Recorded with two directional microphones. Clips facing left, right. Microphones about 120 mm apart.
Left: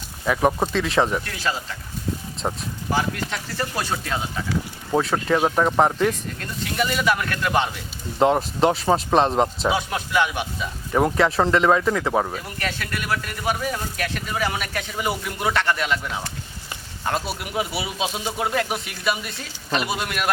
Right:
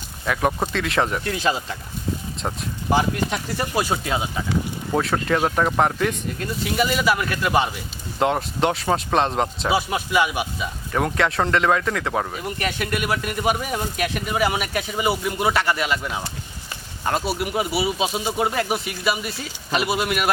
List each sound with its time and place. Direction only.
0.3 s speech: 5° left (ahead or behind)
1.2 s speech: 20° right (ahead or behind)
2.4 s speech: 10° left (ahead or behind)
2.9 s speech: 15° right (ahead or behind)
4.9 s speech: 5° left (ahead or behind)
10.9 s speech: 5° left (ahead or behind)
12.3 s speech: 15° right (ahead or behind)